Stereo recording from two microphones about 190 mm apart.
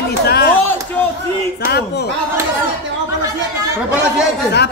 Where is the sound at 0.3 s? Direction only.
55° left (ahead or behind).